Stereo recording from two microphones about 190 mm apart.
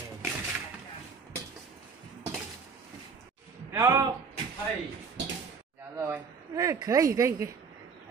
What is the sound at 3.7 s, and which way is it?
Speech, 15° right (ahead or behind).